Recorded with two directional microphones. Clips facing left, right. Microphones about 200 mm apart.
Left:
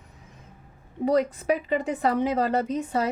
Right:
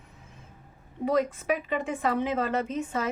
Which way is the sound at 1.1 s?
35° left (ahead or behind).